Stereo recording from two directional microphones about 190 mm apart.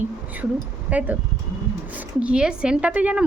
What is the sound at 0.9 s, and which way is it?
Speech, 10° right (ahead or behind).